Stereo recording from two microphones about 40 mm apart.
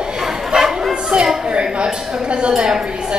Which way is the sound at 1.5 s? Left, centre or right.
Right.